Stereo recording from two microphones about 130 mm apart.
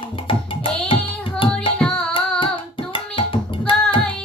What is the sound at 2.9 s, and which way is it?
Music, 40° left (ahead or behind).